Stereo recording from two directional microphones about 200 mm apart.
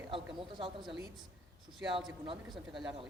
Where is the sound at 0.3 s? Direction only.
25° right (ahead or behind).